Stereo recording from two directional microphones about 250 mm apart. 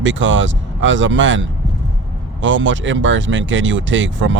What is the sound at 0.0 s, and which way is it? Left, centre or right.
Speech, right.